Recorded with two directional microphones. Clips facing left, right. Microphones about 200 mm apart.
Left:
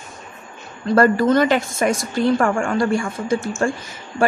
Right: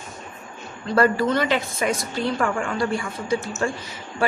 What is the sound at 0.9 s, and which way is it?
Speech, 45° left (ahead or behind).